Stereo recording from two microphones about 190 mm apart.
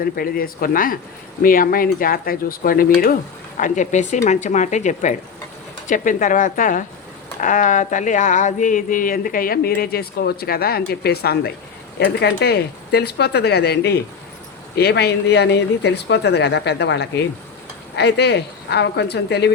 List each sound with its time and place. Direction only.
0.0 s speech: 50° left (ahead or behind)